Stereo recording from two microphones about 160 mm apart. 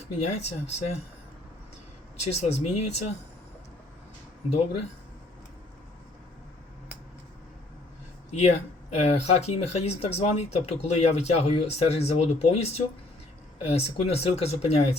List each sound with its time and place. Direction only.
0.0 s speech: 45° left (ahead or behind)
2.2 s speech: 45° left (ahead or behind)
8.3 s speech: 45° left (ahead or behind)